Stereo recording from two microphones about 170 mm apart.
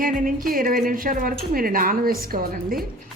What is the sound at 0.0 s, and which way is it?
A woman's voice, 55° right (ahead or behind).